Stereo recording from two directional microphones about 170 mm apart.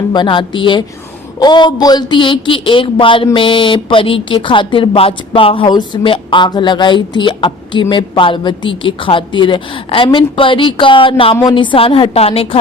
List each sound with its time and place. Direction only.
0.1 s speech: 25° left (ahead or behind)